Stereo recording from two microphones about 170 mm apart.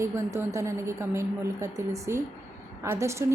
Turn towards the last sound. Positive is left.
turn(degrees=-15)  # may be behind; listen again after turning